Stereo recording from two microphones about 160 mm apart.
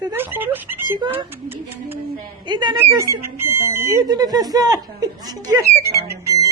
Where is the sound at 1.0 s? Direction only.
30° right (ahead or behind).